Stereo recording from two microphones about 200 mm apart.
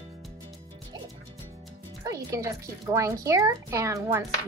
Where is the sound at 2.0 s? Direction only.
15° right (ahead or behind).